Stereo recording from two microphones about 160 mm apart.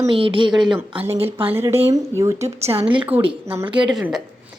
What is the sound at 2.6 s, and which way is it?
Speech, 40° right (ahead or behind).